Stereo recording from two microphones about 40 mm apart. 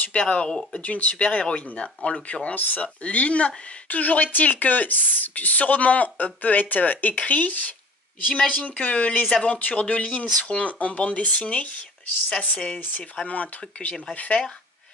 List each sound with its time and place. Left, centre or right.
0.0 s speech: left
0.7 s speech: left
2.5 s speech: left